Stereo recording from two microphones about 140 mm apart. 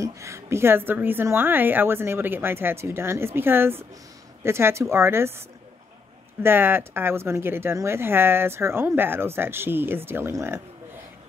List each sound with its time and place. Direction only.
0.0 s a woman's voice: 20° right (ahead or behind)
6.4 s a woman's voice: 15° right (ahead or behind)